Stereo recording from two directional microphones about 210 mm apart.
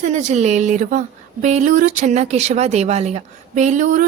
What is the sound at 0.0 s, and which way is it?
A woman's voice, 35° right (ahead or behind).